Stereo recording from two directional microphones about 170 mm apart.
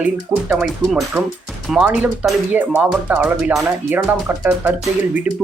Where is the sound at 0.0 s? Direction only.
5° right (ahead or behind).